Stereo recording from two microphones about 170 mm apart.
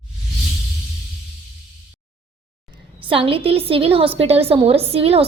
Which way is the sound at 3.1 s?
30° right (ahead or behind).